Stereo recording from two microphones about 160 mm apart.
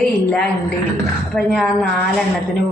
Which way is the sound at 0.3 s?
5° left (ahead or behind).